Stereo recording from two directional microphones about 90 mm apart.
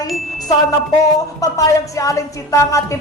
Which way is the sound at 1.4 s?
40° left (ahead or behind).